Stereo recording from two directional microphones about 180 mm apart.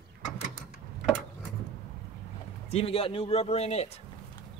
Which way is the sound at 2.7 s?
35° left (ahead or behind).